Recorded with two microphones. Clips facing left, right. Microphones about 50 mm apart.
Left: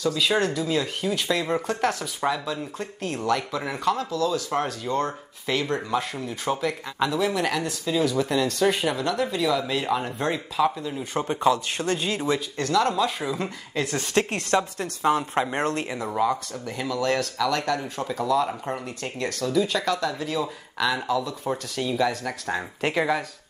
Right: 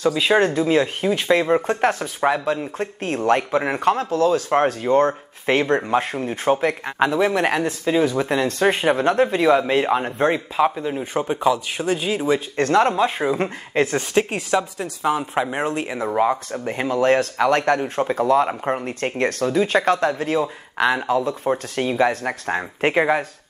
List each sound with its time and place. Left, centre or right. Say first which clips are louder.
0.0 s speech: right 6 dB; right
11.1 s speech: right 2 dB; centre
12.5 s speech: right 6 dB; right
14.1 s speech: right 2 dB; centre
16.1 s speech: right 5 dB; right